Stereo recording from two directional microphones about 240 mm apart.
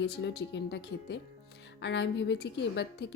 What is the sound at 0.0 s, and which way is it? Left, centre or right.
A woman's voice, left.